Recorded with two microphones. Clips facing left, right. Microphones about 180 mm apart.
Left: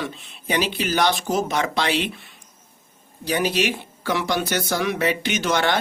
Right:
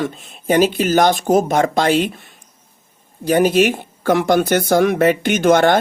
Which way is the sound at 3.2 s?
50° right (ahead or behind).